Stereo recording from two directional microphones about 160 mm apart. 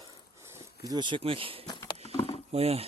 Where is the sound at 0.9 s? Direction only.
30° right (ahead or behind).